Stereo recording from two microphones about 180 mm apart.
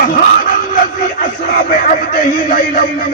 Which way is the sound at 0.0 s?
50° left (ahead or behind).